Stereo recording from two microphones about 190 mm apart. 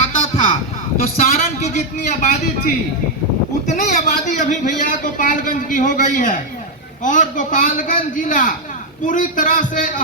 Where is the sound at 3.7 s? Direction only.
40° left (ahead or behind).